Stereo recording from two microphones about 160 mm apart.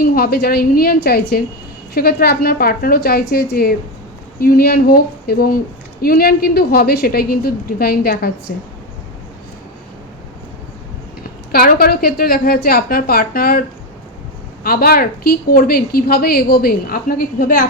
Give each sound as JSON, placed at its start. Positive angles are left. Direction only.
{"t": 0.0, "sound": "a woman's voice", "side_deg": 70}
{"t": 11.5, "sound": "a woman's voice", "side_deg": 70}